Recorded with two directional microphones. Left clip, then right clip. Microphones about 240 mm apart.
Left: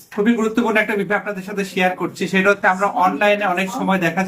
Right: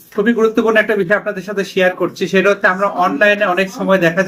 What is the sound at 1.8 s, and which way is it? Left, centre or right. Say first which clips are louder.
Speech: right 5 dB; centre.